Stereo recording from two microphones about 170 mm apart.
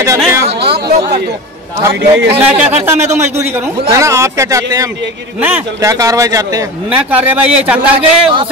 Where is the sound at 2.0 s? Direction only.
80° right.